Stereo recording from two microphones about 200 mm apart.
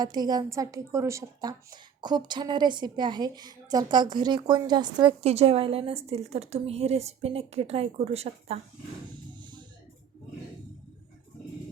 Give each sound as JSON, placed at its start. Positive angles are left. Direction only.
{"t": 0.0, "sound": "speech", "side_deg": -20}